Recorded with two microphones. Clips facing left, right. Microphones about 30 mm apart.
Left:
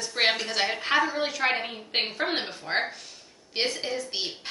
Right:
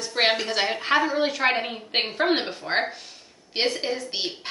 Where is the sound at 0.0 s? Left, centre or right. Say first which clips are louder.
Right 3 dB; centre.